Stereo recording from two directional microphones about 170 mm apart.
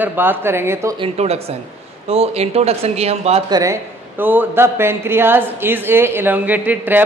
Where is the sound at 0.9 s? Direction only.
35° right (ahead or behind).